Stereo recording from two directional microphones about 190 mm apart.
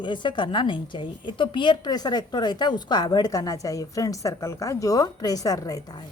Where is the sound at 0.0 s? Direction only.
25° left (ahead or behind).